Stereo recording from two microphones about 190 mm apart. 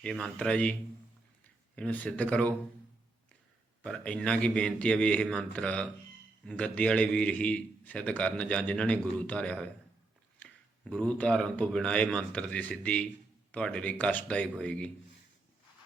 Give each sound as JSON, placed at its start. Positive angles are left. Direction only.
{"t": 0.0, "sound": "a man's voice", "side_deg": 5}
{"t": 3.8, "sound": "a man's voice", "side_deg": 5}